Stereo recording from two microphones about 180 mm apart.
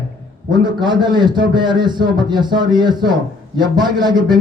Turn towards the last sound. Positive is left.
turn(degrees=-25)  # may be behind; listen again after turning